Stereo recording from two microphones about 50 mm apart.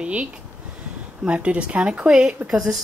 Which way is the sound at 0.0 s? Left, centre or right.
Right.